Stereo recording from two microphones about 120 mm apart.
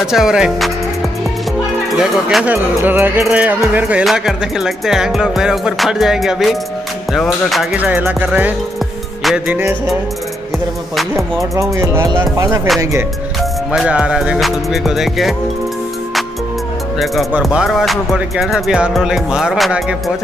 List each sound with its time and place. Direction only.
0.0 s music: 5° right (ahead or behind)
2.0 s speech: 5° right (ahead or behind)
4.0 s music: centre (ahead or behind)
7.7 s speech: 15° right (ahead or behind)
11.1 s speech: 25° right (ahead or behind)
13.7 s music: 10° right (ahead or behind)
17.0 s music: centre (ahead or behind)